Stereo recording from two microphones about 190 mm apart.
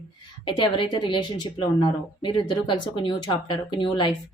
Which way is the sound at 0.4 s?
25° left (ahead or behind).